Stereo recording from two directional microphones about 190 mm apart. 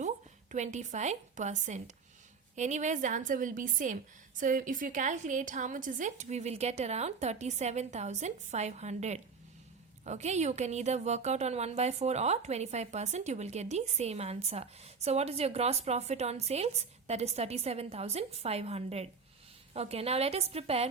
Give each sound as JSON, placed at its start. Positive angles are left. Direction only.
{"t": 0.5, "sound": "a woman's voice", "side_deg": -40}